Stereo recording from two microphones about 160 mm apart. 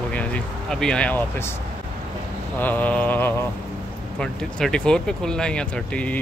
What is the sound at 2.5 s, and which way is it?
Speech, 10° left (ahead or behind).